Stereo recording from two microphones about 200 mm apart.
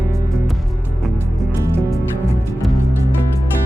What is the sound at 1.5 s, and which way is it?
Music, 15° right (ahead or behind).